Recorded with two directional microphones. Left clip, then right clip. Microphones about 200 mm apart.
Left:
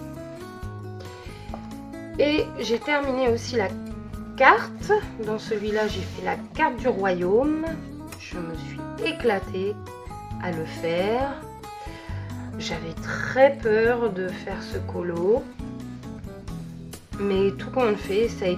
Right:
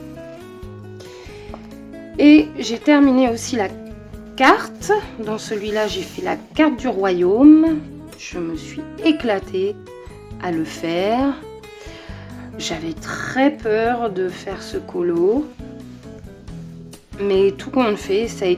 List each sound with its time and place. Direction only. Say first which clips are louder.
2.1 s a woman's voice: right 10 dB; 40° right (ahead or behind)
12.5 s a woman's voice: right 6 dB; 50° right (ahead or behind)
17.2 s a woman's voice: right 7 dB; 50° right (ahead or behind)